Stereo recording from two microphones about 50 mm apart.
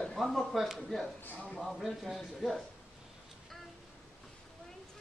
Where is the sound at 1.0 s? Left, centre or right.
Left.